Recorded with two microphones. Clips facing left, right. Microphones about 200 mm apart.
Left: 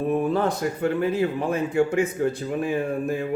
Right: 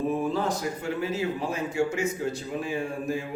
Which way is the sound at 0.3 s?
60° left (ahead or behind).